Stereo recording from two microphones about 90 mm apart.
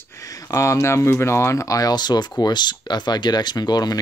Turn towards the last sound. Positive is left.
turn(degrees=50)  # may be behind; listen again after turning